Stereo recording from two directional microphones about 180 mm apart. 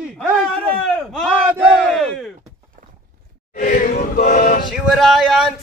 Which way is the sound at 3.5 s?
45° left (ahead or behind).